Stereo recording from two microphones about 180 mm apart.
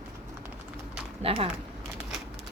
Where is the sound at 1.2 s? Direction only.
30° right (ahead or behind).